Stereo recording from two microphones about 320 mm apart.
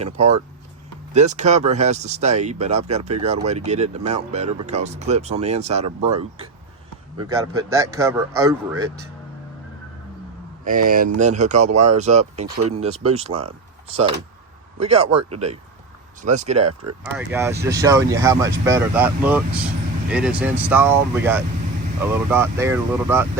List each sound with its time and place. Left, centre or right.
0.0 s speech: centre
10.6 s speech: right
14.8 s speech: centre
17.0 s speech: centre